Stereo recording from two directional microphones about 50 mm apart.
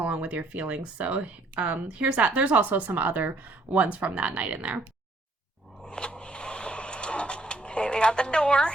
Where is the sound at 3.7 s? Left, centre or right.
Right.